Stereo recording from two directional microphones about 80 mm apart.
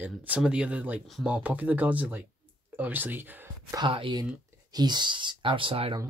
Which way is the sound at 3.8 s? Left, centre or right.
Right.